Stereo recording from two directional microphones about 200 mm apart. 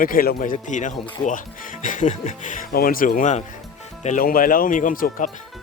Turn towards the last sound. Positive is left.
turn(degrees=45)  # may be behind; listen again after turning